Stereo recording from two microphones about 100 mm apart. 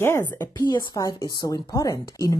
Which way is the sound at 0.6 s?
40° left (ahead or behind).